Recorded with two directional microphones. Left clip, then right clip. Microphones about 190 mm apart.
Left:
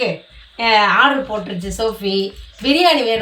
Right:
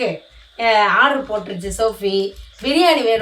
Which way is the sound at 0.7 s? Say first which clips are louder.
Left 1 dB; 20° right (ahead or behind).